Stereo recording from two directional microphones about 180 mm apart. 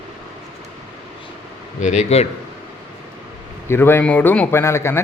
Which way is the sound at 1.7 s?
40° left (ahead or behind).